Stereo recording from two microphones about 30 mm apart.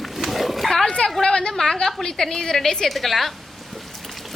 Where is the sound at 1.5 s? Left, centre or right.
Centre.